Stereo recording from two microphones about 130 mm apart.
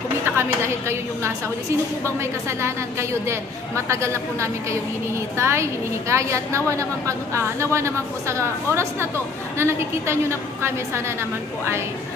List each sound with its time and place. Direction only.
0.2 s a woman's voice: 20° right (ahead or behind)
2.6 s a woman's voice: 20° right (ahead or behind)